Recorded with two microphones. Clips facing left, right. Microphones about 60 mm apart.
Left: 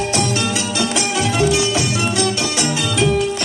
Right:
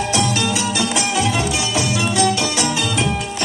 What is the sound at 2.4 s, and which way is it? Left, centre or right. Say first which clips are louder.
Music: even; right.